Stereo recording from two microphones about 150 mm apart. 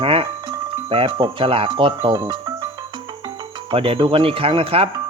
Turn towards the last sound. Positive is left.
turn(degrees=-40)  # may be behind; listen again after turning